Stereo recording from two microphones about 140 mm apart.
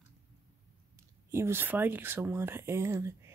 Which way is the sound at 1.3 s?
15° right (ahead or behind).